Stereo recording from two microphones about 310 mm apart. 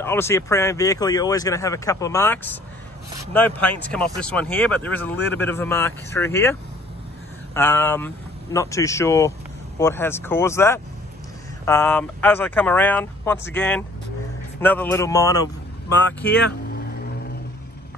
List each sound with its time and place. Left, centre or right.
0.0 s speech: centre
7.5 s speech: centre